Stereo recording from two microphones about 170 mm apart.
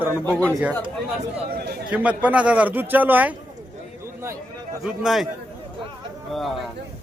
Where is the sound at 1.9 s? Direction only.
10° right (ahead or behind).